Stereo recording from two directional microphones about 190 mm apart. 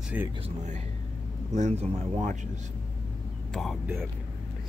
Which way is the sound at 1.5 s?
35° right (ahead or behind).